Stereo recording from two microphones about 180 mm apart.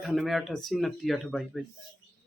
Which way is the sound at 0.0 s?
Centre (ahead or behind).